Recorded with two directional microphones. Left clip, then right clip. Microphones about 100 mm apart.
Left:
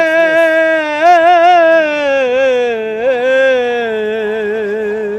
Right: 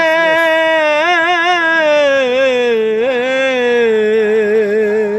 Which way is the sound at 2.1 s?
25° left (ahead or behind).